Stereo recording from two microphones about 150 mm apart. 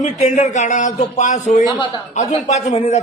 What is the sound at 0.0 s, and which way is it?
A man's voice, 50° left (ahead or behind).